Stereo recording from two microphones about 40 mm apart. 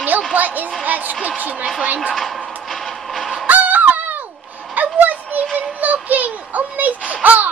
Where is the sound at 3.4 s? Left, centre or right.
Right.